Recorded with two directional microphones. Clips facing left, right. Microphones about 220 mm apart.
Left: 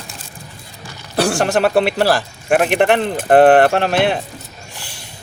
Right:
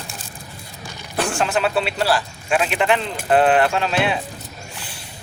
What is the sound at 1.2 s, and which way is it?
Speech, 75° left (ahead or behind).